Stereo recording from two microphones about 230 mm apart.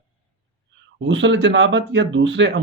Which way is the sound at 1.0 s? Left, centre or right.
Right.